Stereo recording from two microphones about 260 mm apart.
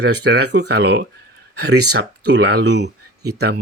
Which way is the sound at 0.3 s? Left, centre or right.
Right.